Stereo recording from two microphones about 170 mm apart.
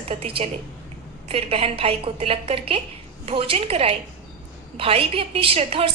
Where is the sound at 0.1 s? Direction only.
35° right (ahead or behind).